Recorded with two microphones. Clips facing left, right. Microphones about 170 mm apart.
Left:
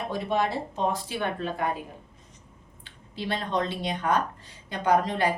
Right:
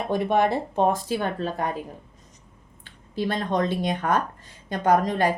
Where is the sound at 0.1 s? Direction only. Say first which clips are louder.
Right 6 dB; 55° right (ahead or behind); by 1.6 s 40° right (ahead or behind).